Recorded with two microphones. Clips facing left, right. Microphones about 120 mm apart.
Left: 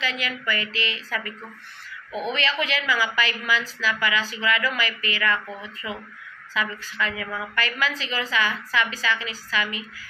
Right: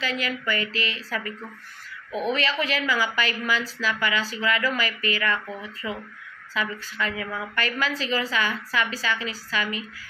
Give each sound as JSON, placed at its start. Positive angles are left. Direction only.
{"t": 0.0, "sound": "a woman's voice", "side_deg": -40}
{"t": 2.3, "sound": "a woman's voice", "side_deg": -40}
{"t": 6.5, "sound": "a woman's voice", "side_deg": -40}